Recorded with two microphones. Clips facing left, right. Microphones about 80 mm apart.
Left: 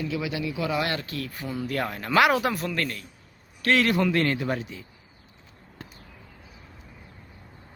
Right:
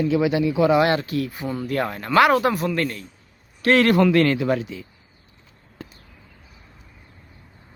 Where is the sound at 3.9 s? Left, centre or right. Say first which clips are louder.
Right 7 dB; right.